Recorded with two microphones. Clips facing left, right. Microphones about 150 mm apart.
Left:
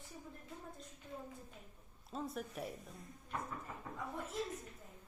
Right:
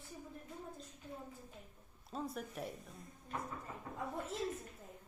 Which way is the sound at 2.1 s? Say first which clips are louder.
Even; centre (ahead or behind).